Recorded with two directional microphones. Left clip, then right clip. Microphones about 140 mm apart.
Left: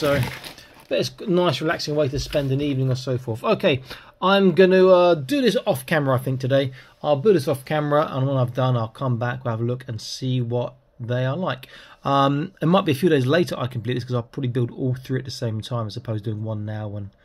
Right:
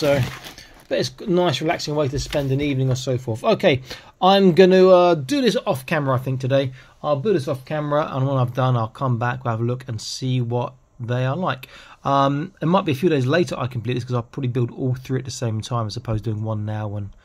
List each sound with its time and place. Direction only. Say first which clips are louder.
0.8 s speech: right 1 dB; 30° right (ahead or behind)
5.9 s speech: left 1 dB; 5° right (ahead or behind)
7.2 s speech: left 3 dB; 10° left (ahead or behind)
8.1 s speech: right 1 dB; 25° right (ahead or behind)
12.0 s speech: right 1 dB; 10° right (ahead or behind); by 16.9 s 35° right (ahead or behind)